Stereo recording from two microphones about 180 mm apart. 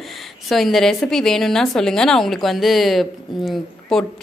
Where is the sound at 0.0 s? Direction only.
Centre (ahead or behind).